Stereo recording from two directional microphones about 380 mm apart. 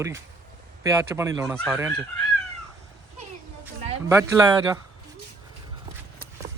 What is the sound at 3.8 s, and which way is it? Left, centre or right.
Speech, centre.